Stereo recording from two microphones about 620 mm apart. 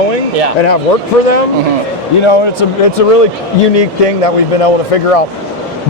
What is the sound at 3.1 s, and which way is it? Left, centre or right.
Speech, left.